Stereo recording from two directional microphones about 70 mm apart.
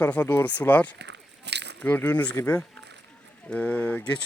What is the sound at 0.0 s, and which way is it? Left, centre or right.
Speech, left.